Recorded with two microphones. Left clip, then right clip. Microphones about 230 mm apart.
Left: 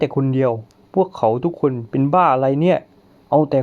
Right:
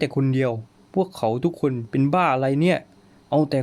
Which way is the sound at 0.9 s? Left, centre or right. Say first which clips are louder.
Left 6 dB; centre.